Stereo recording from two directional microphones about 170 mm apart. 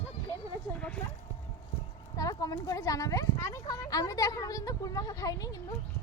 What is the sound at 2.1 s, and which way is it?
Speech, 20° left (ahead or behind).